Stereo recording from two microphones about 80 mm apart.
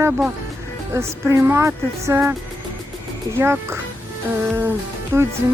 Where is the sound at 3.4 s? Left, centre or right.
Right.